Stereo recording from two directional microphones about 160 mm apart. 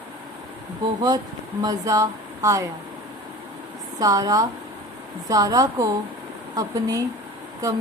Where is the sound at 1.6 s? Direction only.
25° right (ahead or behind).